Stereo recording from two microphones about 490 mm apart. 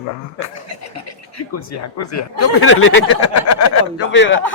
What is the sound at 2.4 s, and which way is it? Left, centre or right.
A man's voice, left.